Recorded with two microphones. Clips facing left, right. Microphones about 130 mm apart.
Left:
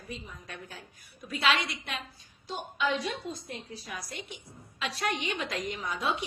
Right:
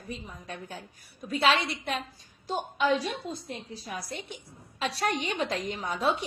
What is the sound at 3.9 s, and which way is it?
Speech, 30° right (ahead or behind).